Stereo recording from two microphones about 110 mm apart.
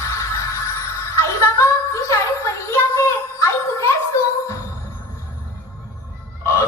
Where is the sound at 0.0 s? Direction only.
30° left (ahead or behind).